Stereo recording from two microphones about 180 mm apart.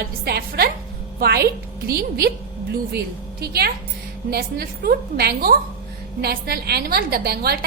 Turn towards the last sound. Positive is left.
turn(degrees=-60)  # may be behind; listen again after turning